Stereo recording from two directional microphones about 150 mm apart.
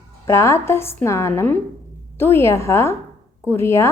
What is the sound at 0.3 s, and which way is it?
A woman's voice, 20° left (ahead or behind).